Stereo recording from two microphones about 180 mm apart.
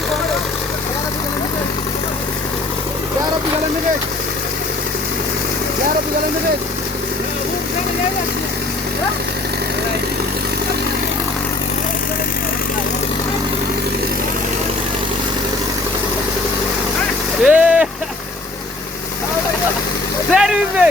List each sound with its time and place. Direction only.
17.4 s vehicle: 5° right (ahead or behind)
20.3 s vehicle: 5° right (ahead or behind)